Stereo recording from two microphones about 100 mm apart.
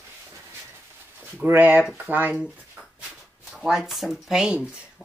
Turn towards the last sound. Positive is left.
turn(degrees=-10)  # may be behind; listen again after turning